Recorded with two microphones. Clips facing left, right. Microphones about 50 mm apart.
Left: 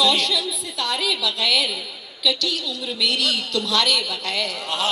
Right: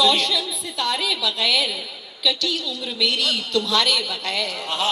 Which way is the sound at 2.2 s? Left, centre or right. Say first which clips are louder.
Even; right.